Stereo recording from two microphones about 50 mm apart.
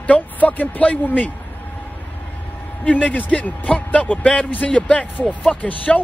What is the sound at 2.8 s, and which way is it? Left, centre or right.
Speech, left.